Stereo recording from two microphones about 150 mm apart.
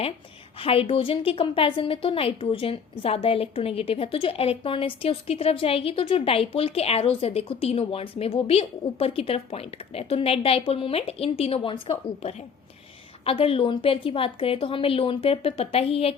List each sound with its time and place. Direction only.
0.6 s a woman's voice: 40° left (ahead or behind)